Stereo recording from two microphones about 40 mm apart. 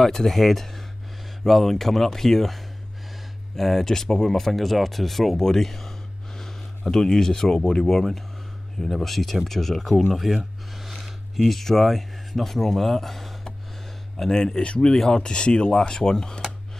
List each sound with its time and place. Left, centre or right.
0.0 s speech: centre
7.8 s speech: centre
10.1 s a sound: centre
11.4 s speech: centre
14.1 s speech: centre
14.6 s speech: left
14.9 s speech: centre